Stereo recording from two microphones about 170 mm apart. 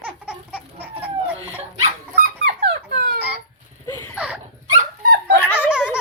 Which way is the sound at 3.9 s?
15° left (ahead or behind).